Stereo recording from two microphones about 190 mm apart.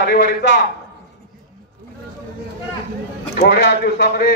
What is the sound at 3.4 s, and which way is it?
Speech, 65° left (ahead or behind).